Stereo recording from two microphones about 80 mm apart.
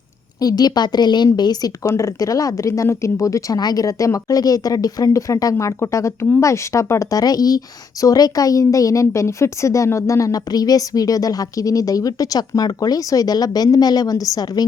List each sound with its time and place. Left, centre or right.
0.3 s a woman's voice: left
1.8 s a woman's voice: left
3.6 s a woman's voice: left